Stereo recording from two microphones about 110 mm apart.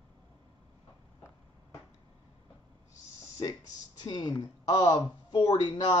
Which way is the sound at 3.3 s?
35° left (ahead or behind).